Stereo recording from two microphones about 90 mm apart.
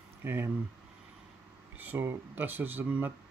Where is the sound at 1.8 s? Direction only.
25° right (ahead or behind).